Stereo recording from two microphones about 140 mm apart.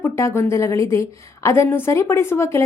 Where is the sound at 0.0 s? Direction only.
20° left (ahead or behind).